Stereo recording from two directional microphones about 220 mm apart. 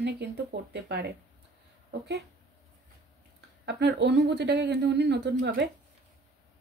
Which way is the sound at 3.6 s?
50° right (ahead or behind).